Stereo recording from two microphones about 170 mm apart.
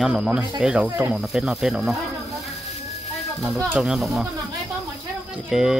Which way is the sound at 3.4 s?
Centre (ahead or behind).